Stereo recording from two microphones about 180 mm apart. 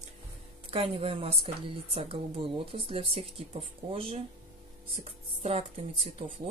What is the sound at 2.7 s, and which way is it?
Speech, 30° right (ahead or behind).